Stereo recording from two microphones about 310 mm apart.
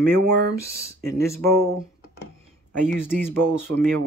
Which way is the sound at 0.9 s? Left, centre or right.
Right.